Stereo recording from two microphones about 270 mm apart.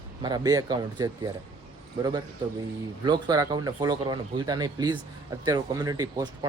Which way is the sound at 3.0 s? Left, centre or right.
Centre.